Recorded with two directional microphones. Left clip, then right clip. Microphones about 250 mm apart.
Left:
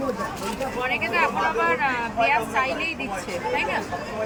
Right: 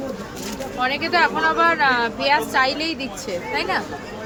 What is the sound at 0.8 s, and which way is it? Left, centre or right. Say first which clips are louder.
Speech: right 5 dB; right.